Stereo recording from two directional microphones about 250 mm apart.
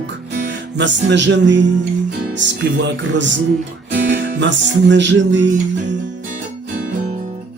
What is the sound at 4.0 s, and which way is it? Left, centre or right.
Music, right.